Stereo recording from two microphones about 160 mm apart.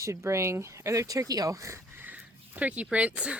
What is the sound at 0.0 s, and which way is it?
Speech, 20° right (ahead or behind).